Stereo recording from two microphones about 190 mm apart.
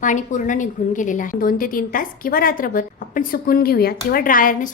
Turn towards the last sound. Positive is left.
turn(degrees=45)  # may be behind; listen again after turning